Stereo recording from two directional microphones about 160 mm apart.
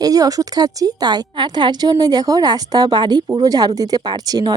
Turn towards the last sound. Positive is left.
turn(degrees=-25)  # may be behind; listen again after turning